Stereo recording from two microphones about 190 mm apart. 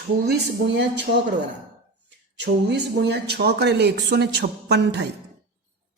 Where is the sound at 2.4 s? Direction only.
60° right (ahead or behind).